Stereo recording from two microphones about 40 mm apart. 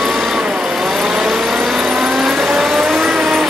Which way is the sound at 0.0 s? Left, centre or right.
Centre.